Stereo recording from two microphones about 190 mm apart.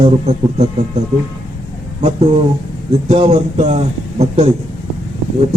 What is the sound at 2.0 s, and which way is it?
A man's voice, 35° right (ahead or behind).